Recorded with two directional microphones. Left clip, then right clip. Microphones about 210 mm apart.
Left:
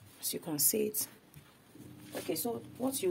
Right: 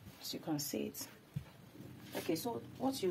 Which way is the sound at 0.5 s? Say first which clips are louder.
Left 8 dB; 55° left (ahead or behind).